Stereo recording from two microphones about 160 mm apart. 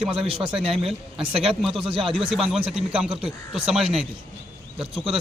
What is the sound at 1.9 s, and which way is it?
Speech, 35° right (ahead or behind).